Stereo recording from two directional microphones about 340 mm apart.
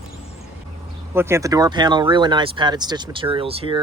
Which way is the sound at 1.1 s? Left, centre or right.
Centre.